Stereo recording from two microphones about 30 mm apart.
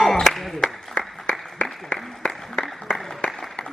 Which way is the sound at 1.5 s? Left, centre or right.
Centre.